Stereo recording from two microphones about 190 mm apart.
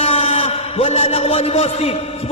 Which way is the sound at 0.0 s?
35° left (ahead or behind).